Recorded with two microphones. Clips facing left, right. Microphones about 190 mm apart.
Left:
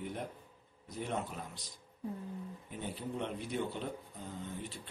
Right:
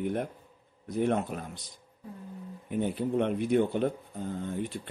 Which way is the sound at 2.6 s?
60° right (ahead or behind).